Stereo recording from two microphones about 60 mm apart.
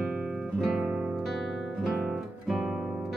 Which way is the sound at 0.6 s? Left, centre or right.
Centre.